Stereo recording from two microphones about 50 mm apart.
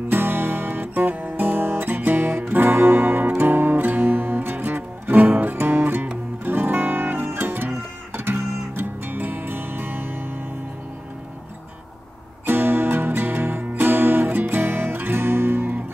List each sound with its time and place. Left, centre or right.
0.1 s guitar: right
6.4 s music: right
12.4 s music: right